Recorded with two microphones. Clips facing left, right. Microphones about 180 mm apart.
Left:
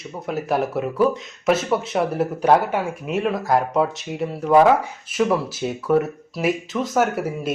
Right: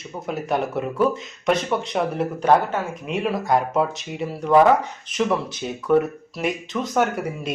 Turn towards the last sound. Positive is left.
turn(degrees=5)  # may be behind; listen again after turning